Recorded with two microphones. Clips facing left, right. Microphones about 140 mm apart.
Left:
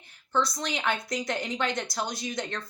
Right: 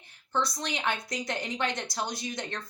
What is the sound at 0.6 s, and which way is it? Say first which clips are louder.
Speech: left 2 dB; 20° right (ahead or behind).